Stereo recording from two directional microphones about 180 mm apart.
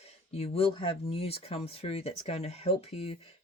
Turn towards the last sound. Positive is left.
turn(degrees=35)  # may be behind; listen again after turning